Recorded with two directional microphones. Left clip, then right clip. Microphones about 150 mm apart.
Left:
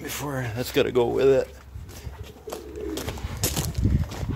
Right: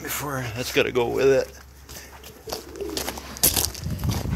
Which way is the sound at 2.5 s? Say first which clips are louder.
Right 2 dB; 80° right.